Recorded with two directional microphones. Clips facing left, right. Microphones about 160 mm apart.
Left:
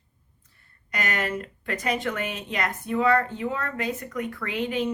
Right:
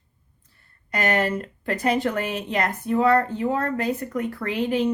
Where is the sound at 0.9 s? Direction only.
30° right (ahead or behind).